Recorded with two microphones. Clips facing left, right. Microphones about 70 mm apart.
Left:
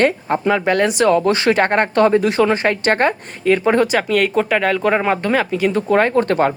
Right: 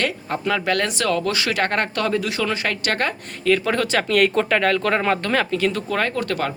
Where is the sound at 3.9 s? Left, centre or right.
Centre.